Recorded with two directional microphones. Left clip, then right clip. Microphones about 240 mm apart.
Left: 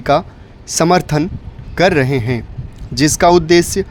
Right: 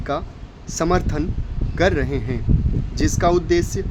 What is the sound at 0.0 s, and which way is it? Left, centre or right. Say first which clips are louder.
Speech: left 12 dB; left.